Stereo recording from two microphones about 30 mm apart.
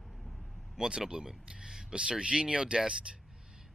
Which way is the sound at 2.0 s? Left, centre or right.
Right.